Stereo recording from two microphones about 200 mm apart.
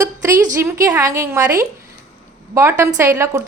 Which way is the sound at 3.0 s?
15° right (ahead or behind).